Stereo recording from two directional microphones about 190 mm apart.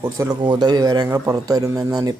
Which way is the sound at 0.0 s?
20° right (ahead or behind).